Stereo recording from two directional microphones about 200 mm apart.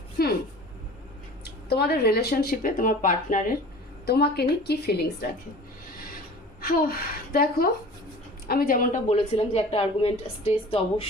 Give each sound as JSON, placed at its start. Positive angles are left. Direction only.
{"t": 0.2, "sound": "a sound", "side_deg": 50}
{"t": 1.7, "sound": "speech", "side_deg": 50}
{"t": 4.0, "sound": "speech", "side_deg": 55}
{"t": 6.6, "sound": "a woman's voice", "side_deg": 45}